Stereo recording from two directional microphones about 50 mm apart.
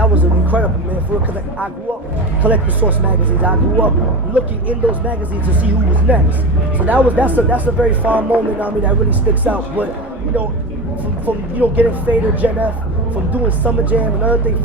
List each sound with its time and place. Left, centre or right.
0.0 s a sound: right
2.4 s speech: right
11.3 s speech: right